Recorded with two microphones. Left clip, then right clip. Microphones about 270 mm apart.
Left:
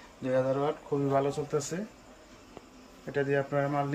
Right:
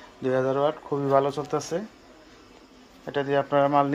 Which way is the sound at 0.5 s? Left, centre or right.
Centre.